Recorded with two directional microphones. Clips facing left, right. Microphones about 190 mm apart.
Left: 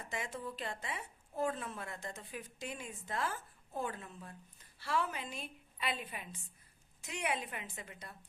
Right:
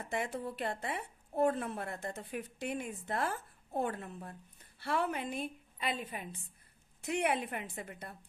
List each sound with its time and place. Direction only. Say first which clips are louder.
0.0 s a woman's voice: right 5 dB; 60° right (ahead or behind)